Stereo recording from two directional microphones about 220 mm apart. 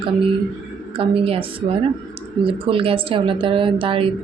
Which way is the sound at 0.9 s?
25° right (ahead or behind).